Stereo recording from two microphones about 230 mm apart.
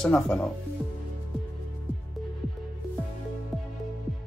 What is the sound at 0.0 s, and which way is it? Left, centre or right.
Speech, centre.